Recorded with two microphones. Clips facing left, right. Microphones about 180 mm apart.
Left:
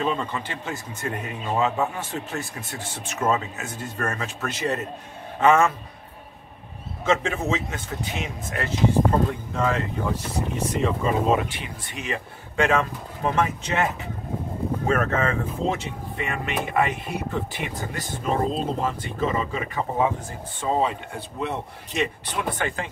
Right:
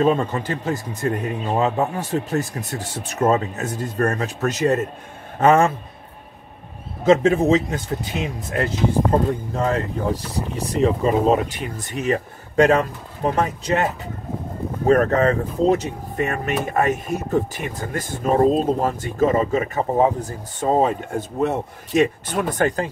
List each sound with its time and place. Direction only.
0.0 s speech: 45° right (ahead or behind)
7.1 s speech: 40° right (ahead or behind)
14.9 s speech: 40° right (ahead or behind)